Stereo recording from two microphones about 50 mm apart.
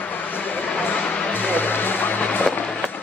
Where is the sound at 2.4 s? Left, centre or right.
Left.